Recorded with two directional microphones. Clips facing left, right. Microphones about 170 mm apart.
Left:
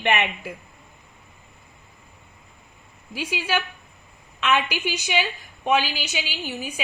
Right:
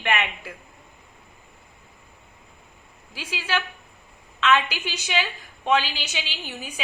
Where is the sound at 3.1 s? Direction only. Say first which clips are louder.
Left 3 dB; 15° left (ahead or behind).